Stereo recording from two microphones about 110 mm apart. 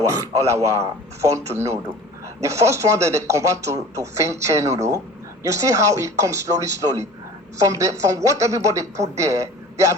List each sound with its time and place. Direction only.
0.0 s speech: 30° right (ahead or behind)